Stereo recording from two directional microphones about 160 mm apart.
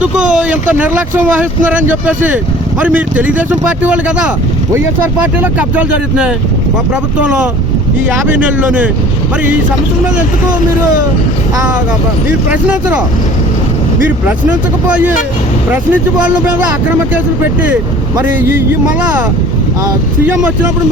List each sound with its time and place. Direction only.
0.0 s speech: 5° right (ahead or behind)
5.4 s speech: 10° right (ahead or behind)
8.1 s speech: 10° right (ahead or behind)
15.7 s speech: 10° right (ahead or behind)
18.3 s speech: 15° right (ahead or behind)